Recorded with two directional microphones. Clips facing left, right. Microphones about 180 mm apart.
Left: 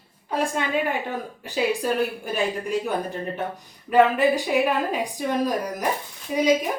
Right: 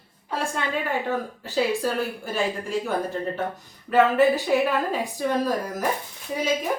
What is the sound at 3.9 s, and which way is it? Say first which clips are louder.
A woman's voice: even; 15° left (ahead or behind).